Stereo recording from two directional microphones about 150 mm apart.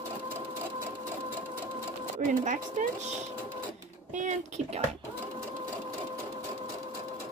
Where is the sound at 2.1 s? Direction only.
55° right (ahead or behind).